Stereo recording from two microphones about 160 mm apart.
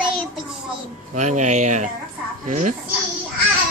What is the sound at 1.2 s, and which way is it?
Speech, 50° right (ahead or behind).